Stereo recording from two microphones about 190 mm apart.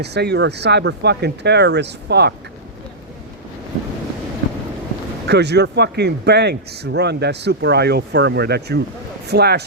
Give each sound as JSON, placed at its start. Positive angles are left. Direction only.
{"t": 0.0, "sound": "speech", "side_deg": -60}
{"t": 5.2, "sound": "speech", "side_deg": -60}